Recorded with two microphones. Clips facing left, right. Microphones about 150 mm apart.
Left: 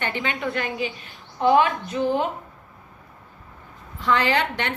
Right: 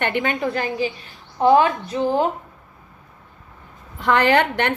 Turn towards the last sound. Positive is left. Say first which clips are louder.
# right 6 dB
turn(degrees=-55)  # may be behind; listen again after turning